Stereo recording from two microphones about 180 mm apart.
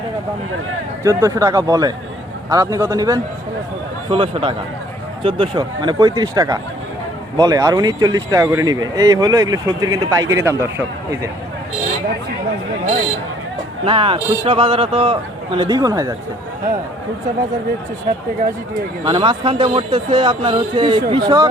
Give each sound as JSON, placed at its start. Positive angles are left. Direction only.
{"t": 1.0, "sound": "a man's voice", "side_deg": -15}
{"t": 4.1, "sound": "speech", "side_deg": -30}
{"t": 13.8, "sound": "speech", "side_deg": -30}
{"t": 19.0, "sound": "speech", "side_deg": -25}